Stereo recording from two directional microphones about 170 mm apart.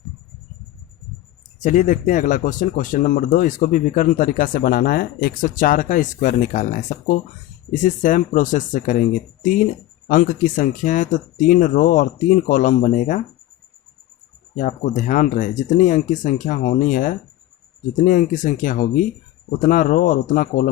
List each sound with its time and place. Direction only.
1.6 s speech: 45° left (ahead or behind)
14.5 s speech: 50° left (ahead or behind)